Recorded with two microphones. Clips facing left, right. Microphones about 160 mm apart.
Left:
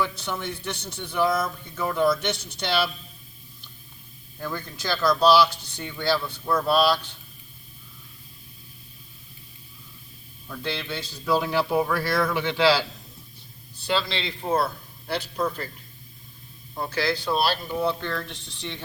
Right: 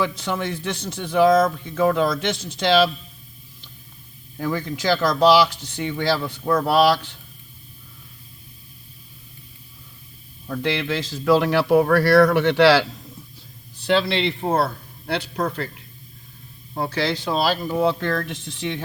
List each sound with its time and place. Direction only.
0.0 s a man's voice: 90° right
4.4 s a man's voice: 90° right
10.6 s speech: 90° right
13.8 s speech: 65° right (ahead or behind)
17.0 s speech: 25° right (ahead or behind)
17.3 s a man's voice: 90° right